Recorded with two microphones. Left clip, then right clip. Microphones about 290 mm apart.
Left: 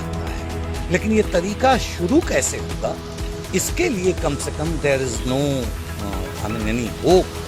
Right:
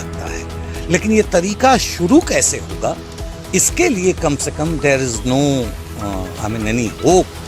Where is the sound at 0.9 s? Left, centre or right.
Right.